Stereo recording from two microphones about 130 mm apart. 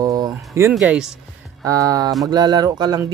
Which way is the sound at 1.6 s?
25° right (ahead or behind).